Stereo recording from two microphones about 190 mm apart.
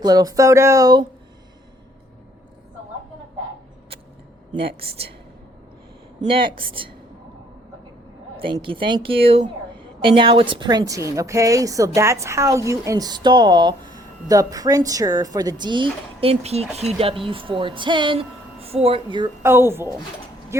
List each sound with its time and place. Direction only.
0.0 s speech: 20° right (ahead or behind)
4.5 s speech: 30° right (ahead or behind)
6.2 s speech: 25° right (ahead or behind)
8.4 s speech: 25° right (ahead or behind)
19.4 s speech: 10° right (ahead or behind)